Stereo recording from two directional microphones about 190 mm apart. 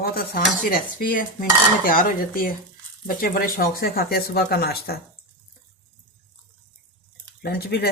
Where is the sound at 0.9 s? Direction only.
45° left (ahead or behind).